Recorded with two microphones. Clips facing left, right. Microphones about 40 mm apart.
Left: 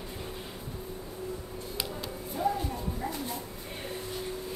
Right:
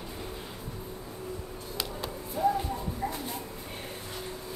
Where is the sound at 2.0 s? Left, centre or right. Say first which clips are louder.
Right 2 dB; centre.